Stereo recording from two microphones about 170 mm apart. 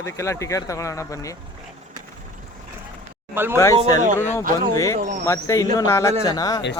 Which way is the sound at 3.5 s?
20° left (ahead or behind).